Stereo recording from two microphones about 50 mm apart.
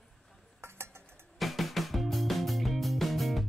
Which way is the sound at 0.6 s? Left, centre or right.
Right.